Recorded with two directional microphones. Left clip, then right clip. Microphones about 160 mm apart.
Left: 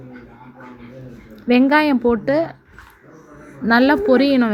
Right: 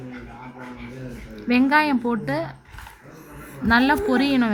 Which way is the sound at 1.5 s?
15° left (ahead or behind).